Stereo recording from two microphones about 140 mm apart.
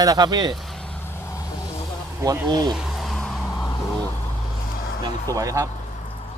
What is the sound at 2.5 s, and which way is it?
Speech, 30° right (ahead or behind).